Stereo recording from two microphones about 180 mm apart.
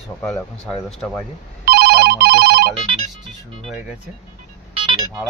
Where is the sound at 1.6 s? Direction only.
65° right (ahead or behind).